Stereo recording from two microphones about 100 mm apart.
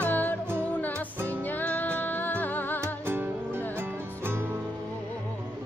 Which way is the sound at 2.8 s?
25° right (ahead or behind).